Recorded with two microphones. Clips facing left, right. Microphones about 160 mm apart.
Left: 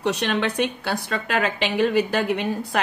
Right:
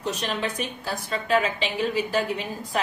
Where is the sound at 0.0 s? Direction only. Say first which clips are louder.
Left 5 dB; 70° left (ahead or behind).